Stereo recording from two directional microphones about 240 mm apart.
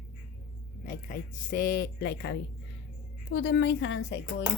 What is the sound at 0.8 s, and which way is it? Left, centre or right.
A woman's voice, left.